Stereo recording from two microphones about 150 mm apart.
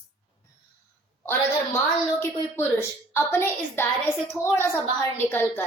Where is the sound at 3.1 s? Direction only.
15° left (ahead or behind).